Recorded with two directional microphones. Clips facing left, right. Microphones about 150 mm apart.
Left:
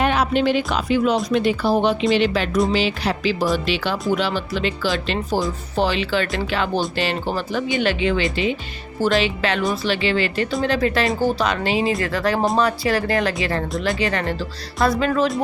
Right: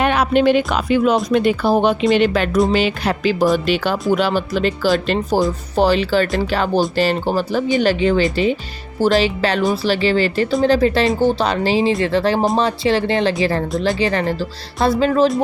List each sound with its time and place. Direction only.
0.0 s speech: 60° right (ahead or behind); by 15.3 s 30° right (ahead or behind)